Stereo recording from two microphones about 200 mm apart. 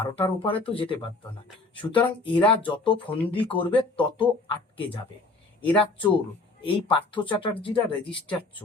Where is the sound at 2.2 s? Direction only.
25° left (ahead or behind).